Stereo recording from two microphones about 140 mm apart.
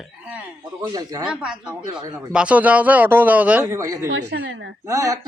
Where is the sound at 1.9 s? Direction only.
30° right (ahead or behind).